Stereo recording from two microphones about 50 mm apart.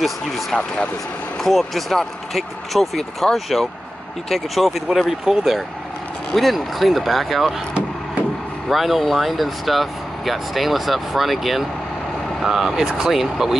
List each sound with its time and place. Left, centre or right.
0.5 s speech: centre
1.4 s speech: centre
5.3 s speech: centre
6.3 s speech: centre
8.6 s speech: centre